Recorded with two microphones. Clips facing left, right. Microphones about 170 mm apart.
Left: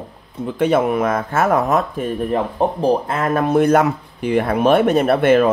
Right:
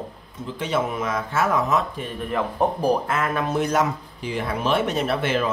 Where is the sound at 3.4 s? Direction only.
55° left (ahead or behind).